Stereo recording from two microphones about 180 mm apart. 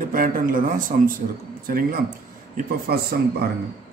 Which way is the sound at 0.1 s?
50° right (ahead or behind).